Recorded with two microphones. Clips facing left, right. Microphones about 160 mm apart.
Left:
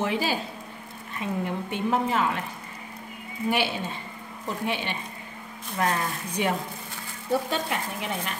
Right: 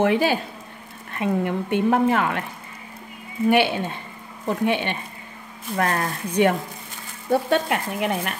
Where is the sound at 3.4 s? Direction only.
60° right (ahead or behind).